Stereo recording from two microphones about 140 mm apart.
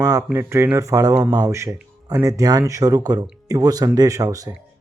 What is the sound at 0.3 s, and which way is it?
Speech, 20° right (ahead or behind).